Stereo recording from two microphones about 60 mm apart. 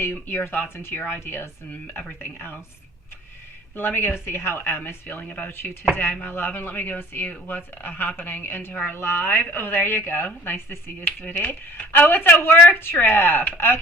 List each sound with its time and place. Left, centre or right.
0.1 s speech: left
0.9 s speech: left
3.8 s speech: left